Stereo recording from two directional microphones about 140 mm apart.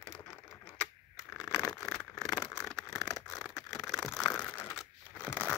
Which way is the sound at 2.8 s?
20° left (ahead or behind).